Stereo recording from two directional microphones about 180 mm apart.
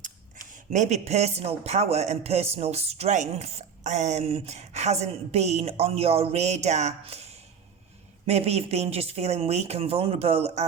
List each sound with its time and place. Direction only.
0.0 s a woman's voice: 45° right (ahead or behind)